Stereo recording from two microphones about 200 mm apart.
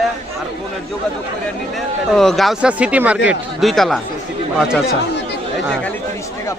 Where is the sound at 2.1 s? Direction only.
Centre (ahead or behind).